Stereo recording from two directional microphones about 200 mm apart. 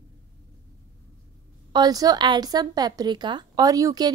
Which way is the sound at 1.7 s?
20° right (ahead or behind).